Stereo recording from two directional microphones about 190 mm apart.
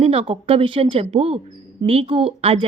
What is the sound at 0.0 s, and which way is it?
A woman's voice, 30° right (ahead or behind).